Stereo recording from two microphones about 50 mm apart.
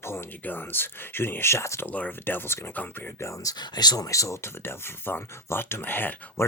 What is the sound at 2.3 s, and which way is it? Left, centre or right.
Speech, left.